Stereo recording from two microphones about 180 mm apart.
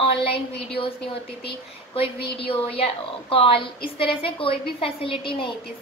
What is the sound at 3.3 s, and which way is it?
A woman's voice, 30° left (ahead or behind).